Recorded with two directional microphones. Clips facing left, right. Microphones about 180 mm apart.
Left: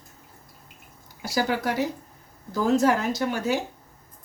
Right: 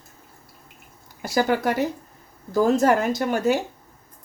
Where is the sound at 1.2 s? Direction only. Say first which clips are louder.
Right 4 dB; 50° right (ahead or behind).